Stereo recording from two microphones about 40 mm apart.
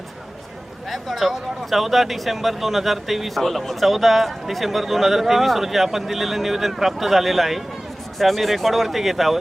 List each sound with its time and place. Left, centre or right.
0.9 s speech: centre